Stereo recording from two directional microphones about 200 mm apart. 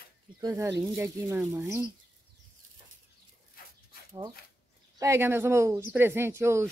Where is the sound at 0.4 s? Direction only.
20° right (ahead or behind).